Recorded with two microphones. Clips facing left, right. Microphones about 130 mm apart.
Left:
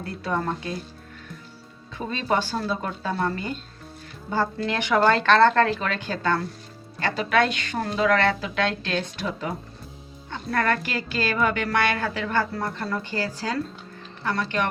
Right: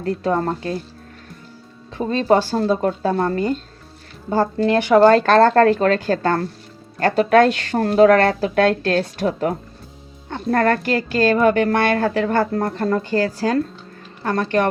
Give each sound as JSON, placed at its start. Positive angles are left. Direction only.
{"t": 0.0, "sound": "speech", "side_deg": -40}
{"t": 2.0, "sound": "a woman's voice", "side_deg": -40}